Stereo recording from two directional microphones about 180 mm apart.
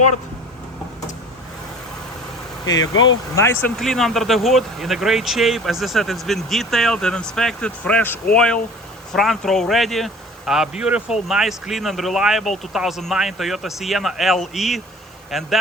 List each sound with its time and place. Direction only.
2.6 s speech: 20° left (ahead or behind)
2.9 s speech: 90° left
3.3 s speech: 15° left (ahead or behind)
3.8 s speech: centre (ahead or behind)